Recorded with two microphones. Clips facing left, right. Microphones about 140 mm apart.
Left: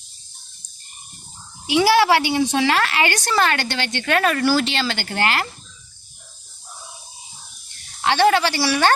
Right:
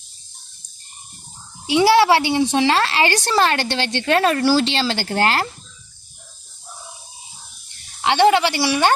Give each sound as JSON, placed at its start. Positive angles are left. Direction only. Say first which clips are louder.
{"t": 1.6, "sound": "speech", "louder": "right 2 dB", "side_deg": -25}
{"t": 8.0, "sound": "speech", "louder": "right 2 dB", "side_deg": -20}